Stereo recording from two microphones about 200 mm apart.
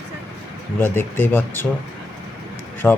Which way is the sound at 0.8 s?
10° left (ahead or behind).